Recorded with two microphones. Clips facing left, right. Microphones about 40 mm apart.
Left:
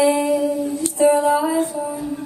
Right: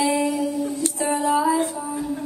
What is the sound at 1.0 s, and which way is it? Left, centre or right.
Music, left.